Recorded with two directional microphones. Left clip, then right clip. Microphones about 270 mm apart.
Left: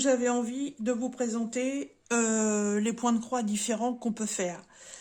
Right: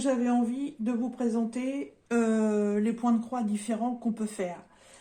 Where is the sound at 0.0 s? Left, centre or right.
Left.